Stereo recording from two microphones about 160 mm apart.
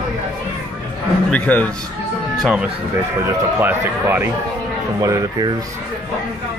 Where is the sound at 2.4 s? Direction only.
5° right (ahead or behind).